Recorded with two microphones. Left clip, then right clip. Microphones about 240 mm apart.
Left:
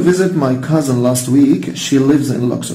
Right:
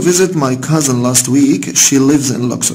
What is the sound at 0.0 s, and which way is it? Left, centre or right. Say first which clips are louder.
Speech: right 1 dB; right.